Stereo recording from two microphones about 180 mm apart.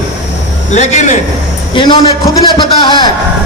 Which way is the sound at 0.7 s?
40° left (ahead or behind).